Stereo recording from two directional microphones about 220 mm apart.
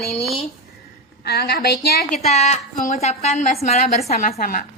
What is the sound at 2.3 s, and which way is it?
A woman's voice, 30° left (ahead or behind).